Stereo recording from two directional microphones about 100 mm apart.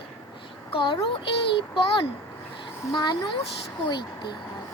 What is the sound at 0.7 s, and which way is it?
Speech, 55° left (ahead or behind).